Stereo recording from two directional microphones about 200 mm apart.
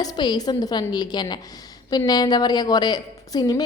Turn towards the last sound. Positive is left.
turn(degrees=20)  # may be behind; listen again after turning